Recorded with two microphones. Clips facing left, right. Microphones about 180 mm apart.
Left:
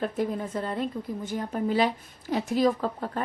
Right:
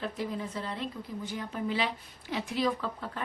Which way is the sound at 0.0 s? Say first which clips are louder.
Left 6 dB; 50° left (ahead or behind).